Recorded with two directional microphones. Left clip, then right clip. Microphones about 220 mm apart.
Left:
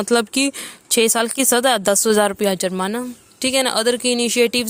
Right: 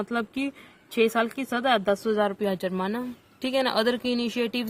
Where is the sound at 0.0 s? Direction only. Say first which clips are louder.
Left 11 dB; 50° left (ahead or behind).